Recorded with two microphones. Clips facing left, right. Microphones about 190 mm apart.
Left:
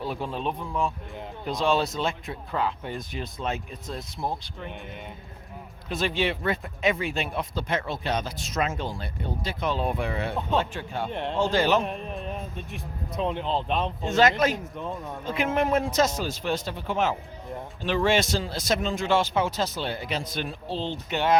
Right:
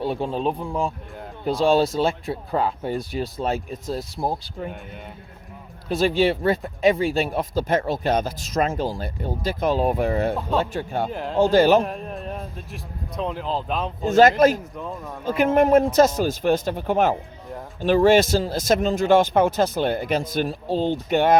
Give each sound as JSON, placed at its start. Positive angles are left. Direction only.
{"t": 0.0, "sound": "a man's voice", "side_deg": -30}
{"t": 5.9, "sound": "speech", "side_deg": -35}
{"t": 11.1, "sound": "speech", "side_deg": 0}
{"t": 11.3, "sound": "speech", "side_deg": -40}
{"t": 11.8, "sound": "a man's voice", "side_deg": 0}
{"t": 14.0, "sound": "speech", "side_deg": -45}
{"t": 14.5, "sound": "speech", "side_deg": 0}
{"t": 15.3, "sound": "speech", "side_deg": -40}